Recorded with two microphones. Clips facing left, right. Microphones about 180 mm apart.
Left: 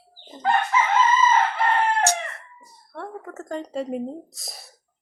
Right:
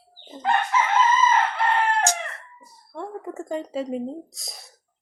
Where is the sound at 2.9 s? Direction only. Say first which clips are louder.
Right 2 dB; 15° right (ahead or behind).